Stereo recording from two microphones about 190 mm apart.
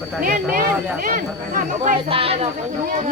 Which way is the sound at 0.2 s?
50° right (ahead or behind).